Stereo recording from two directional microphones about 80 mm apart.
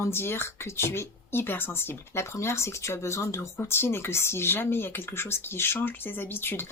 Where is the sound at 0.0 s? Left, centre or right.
Left.